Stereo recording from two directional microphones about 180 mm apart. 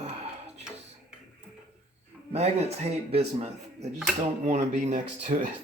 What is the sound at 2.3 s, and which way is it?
A man's voice, 35° right (ahead or behind).